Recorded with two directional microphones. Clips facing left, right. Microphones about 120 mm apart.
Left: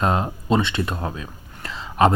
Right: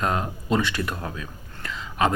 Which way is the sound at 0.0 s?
30° left (ahead or behind).